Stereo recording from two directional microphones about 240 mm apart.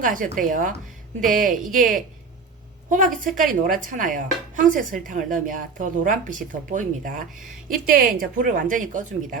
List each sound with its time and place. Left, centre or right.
0.0 s speech: right